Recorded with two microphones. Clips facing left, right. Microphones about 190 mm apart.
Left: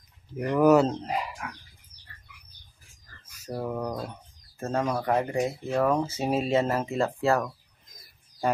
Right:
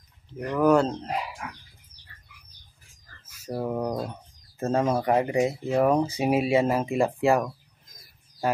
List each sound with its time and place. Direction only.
0.4 s speech: 10° left (ahead or behind)
3.4 s speech: 10° right (ahead or behind)